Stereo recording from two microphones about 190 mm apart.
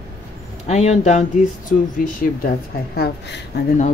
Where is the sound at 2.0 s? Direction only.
50° left (ahead or behind).